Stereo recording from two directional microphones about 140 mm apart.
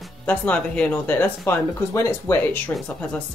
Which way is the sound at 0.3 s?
10° left (ahead or behind).